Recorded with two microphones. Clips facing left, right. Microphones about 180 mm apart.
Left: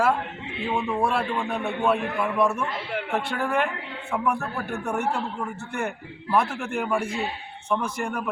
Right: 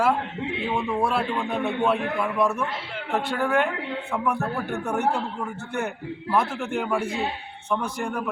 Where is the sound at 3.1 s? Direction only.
Centre (ahead or behind).